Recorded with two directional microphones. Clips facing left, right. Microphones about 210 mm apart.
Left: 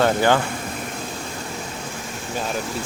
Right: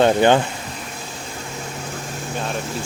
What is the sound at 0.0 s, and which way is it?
Speech, 20° right (ahead or behind).